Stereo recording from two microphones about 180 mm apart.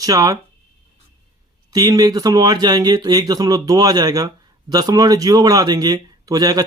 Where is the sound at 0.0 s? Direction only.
20° right (ahead or behind).